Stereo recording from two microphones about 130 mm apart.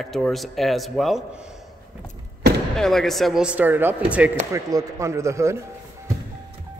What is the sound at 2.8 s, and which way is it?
Speech, 5° left (ahead or behind).